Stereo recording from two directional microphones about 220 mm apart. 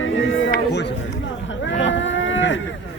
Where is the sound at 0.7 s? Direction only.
50° left (ahead or behind).